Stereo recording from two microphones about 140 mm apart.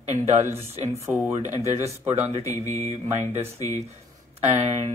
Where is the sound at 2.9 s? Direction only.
50° right (ahead or behind).